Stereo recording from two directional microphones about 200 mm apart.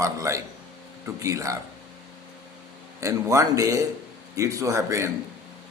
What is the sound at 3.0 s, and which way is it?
A man's voice, 15° right (ahead or behind).